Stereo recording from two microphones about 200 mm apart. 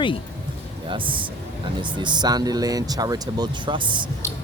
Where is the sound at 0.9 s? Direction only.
25° right (ahead or behind).